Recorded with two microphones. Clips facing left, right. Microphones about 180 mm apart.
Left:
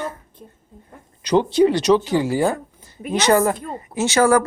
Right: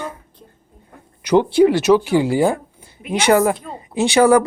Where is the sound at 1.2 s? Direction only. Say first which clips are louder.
Right 3 dB; 10° right (ahead or behind).